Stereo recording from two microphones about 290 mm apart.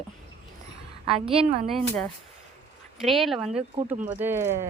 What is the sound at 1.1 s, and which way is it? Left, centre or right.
Speech, centre.